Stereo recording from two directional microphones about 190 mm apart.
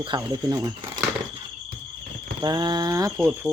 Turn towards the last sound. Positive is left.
turn(degrees=-20)  # may be behind; listen again after turning